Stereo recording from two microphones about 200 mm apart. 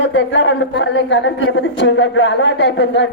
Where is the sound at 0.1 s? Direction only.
65° left (ahead or behind).